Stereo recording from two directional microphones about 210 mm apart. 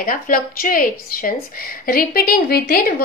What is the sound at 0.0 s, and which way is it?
Speech, 45° left (ahead or behind).